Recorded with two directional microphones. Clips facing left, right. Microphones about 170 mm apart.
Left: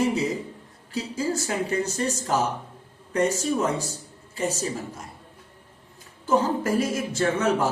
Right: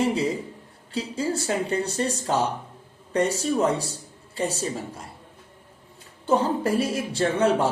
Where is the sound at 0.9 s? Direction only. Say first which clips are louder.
Even; 30° right (ahead or behind).